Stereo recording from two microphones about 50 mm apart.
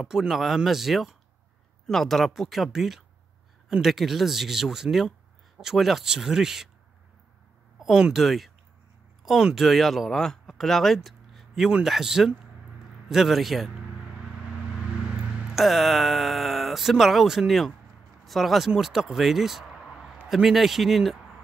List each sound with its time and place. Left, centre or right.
0.0 s speech: centre
1.9 s speech: centre
7.8 s speech: centre
8.2 s speech: centre
15.0 s a sound: right
15.4 s speech: centre
19.9 s a sound: centre
20.4 s speech: centre